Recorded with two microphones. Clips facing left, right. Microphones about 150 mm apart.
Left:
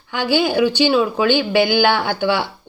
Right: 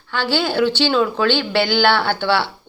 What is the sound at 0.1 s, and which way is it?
Speech, 15° left (ahead or behind).